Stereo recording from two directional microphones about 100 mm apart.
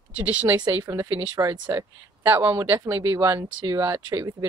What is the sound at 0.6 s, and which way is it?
Speech, 45° right (ahead or behind).